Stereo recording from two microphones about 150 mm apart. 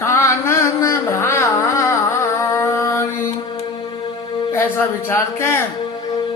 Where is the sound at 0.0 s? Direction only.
20° left (ahead or behind).